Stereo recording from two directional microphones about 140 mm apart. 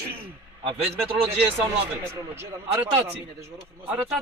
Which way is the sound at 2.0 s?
20° right (ahead or behind).